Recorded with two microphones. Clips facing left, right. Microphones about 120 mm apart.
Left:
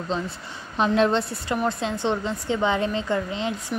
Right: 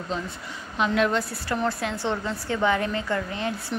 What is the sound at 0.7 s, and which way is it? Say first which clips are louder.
Speech: left 3 dB; 30° left (ahead or behind).